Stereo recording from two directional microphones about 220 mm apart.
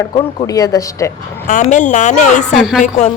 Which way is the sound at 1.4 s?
35° left (ahead or behind).